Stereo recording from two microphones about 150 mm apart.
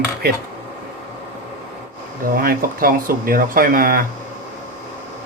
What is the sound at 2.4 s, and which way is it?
Speech, 75° right (ahead or behind).